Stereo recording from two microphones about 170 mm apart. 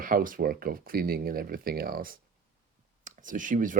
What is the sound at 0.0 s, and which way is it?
Speech, 55° right (ahead or behind).